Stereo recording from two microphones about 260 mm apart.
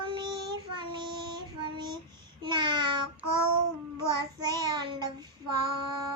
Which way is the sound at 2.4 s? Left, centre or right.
Centre.